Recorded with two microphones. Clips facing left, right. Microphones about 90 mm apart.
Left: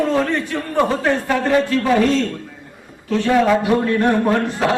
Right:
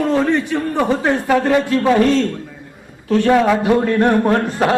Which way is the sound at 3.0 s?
40° right (ahead or behind).